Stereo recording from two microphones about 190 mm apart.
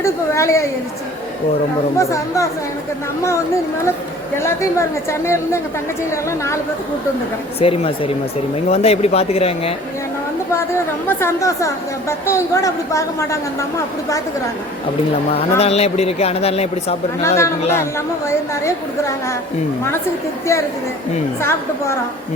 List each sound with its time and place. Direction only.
0.0 s speech: 15° left (ahead or behind)
2.0 s speech: 15° left (ahead or behind)
4.4 s speech: 15° left (ahead or behind)
7.6 s speech: 30° left (ahead or behind)
11.2 s speech: 15° left (ahead or behind)
15.3 s speech: 30° left (ahead or behind)
17.2 s speech: 15° left (ahead or behind)